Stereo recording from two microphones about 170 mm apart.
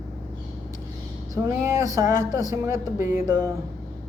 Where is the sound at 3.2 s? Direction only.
15° right (ahead or behind).